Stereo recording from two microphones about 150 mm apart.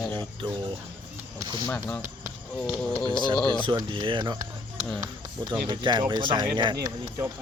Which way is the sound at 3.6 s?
35° right (ahead or behind).